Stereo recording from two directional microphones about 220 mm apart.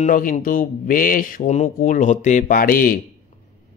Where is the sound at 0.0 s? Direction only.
35° left (ahead or behind).